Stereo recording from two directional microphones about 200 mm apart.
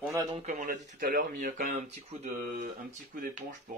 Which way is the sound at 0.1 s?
15° right (ahead or behind).